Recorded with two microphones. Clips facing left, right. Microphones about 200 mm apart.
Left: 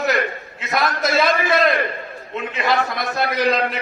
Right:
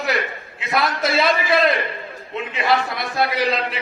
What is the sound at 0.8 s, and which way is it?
Speech, 45° left (ahead or behind).